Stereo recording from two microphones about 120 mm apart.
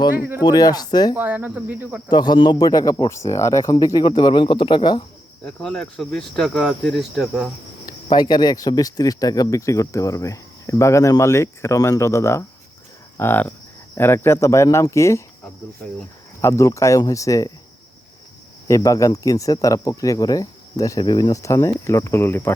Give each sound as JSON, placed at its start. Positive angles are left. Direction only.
{"t": 0.4, "sound": "speech", "side_deg": 35}
{"t": 1.1, "sound": "speech", "side_deg": -15}
{"t": 2.0, "sound": "speech", "side_deg": 35}
{"t": 3.1, "sound": "speech", "side_deg": 25}
{"t": 5.5, "sound": "speech", "side_deg": 5}
{"t": 8.1, "sound": "speech", "side_deg": 35}
{"t": 13.1, "sound": "cattle", "side_deg": 20}
{"t": 13.9, "sound": "speech", "side_deg": 20}
{"t": 16.4, "sound": "speech", "side_deg": 25}
{"t": 18.7, "sound": "speech", "side_deg": 25}